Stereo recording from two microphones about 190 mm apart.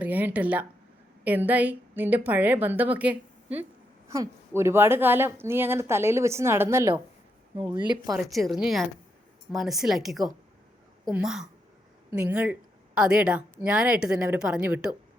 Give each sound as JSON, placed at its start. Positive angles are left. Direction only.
{"t": 0.0, "sound": "a sound", "side_deg": -10}
{"t": 1.2, "sound": "a woman's voice", "side_deg": -10}
{"t": 8.3, "sound": "a woman's voice", "side_deg": 0}